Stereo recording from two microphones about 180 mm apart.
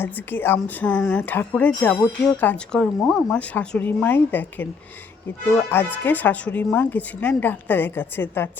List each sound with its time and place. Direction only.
0.0 s speech: 10° left (ahead or behind)